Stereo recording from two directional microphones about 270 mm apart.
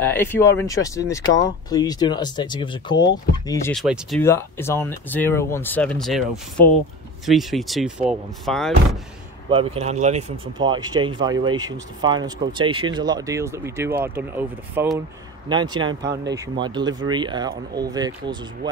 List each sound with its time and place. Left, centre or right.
0.0 s speech: centre
3.7 s speech: centre
9.5 s speech: right